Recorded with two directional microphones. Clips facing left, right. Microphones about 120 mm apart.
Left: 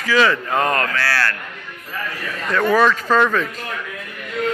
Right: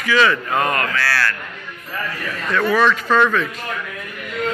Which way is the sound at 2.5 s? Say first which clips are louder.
Left 1 dB; 35° left (ahead or behind).